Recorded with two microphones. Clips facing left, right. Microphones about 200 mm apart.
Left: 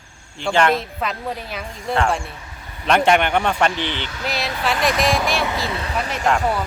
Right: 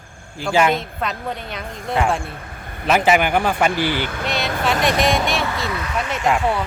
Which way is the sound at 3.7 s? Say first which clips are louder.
Right 5 dB; 55° right (ahead or behind).